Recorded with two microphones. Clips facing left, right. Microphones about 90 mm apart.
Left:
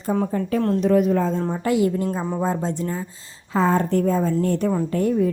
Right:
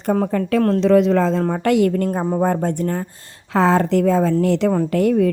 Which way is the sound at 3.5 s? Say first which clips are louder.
Right 4 dB; 85° right.